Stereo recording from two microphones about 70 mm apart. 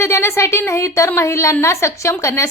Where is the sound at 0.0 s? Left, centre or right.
Left.